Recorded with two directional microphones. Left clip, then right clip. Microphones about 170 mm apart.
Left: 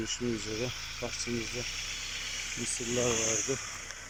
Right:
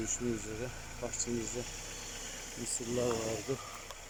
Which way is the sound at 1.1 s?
55° right (ahead or behind).